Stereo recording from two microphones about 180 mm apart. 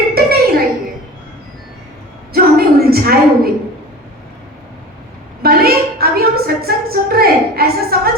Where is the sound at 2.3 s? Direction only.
60° right (ahead or behind).